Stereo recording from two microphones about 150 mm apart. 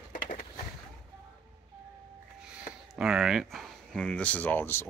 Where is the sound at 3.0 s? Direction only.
5° right (ahead or behind); by 4.8 s 15° left (ahead or behind).